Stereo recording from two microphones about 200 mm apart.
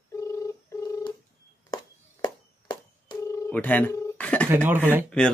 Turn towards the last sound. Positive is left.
turn(degrees=5)  # may be behind; listen again after turning